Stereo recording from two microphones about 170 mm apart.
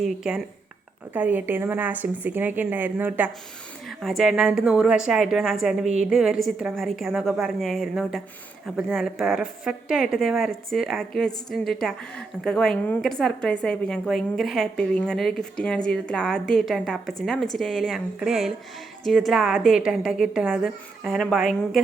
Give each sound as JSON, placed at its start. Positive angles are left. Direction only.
{"t": 0.0, "sound": "a woman's voice", "side_deg": 0}
{"t": 5.8, "sound": "a woman's voice", "side_deg": -40}
{"t": 6.1, "sound": "a woman's voice", "side_deg": -5}